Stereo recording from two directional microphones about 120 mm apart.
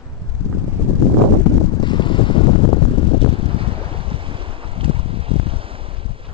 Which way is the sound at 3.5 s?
50° right (ahead or behind).